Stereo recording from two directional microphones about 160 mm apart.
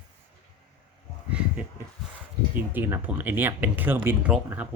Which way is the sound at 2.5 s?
10° right (ahead or behind).